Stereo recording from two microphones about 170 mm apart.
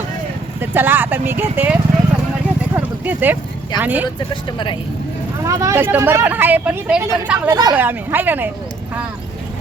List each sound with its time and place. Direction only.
0.6 s speech: 10° right (ahead or behind)
2.7 s a sound: 10° right (ahead or behind)
3.8 s speech: 10° right (ahead or behind)
4.5 s speech: 30° left (ahead or behind)
5.5 s speech: 20° right (ahead or behind)
7.8 s speech: 10° right (ahead or behind)